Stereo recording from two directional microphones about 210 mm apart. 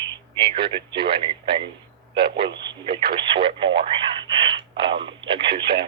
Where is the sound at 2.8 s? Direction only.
25° right (ahead or behind).